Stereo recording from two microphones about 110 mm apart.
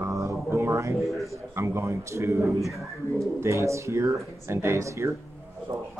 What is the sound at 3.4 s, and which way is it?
A man's voice, 25° right (ahead or behind).